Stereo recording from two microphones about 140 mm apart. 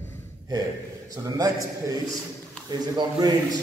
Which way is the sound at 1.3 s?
25° right (ahead or behind).